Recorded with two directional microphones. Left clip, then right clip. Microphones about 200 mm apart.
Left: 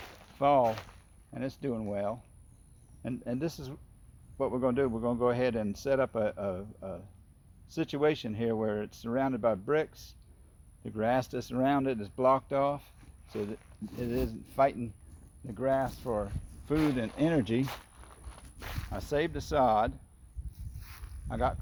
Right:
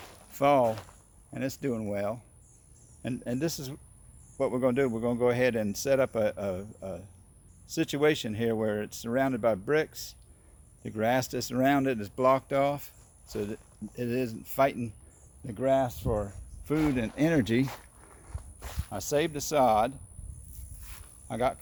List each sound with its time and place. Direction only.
0.0 s mechanisms: 35° left (ahead or behind)
0.3 s speech: 20° right (ahead or behind)
0.7 s speech: 40° left (ahead or behind)
1.3 s speech: 20° right (ahead or behind)
16.7 s speech: 45° left (ahead or behind)
17.2 s speech: 25° right (ahead or behind)
17.7 s walk: 45° left (ahead or behind)
18.9 s speech: 5° right (ahead or behind)
21.2 s speech: 15° right (ahead or behind)